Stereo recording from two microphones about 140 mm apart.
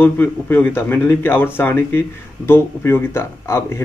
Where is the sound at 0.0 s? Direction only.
15° left (ahead or behind).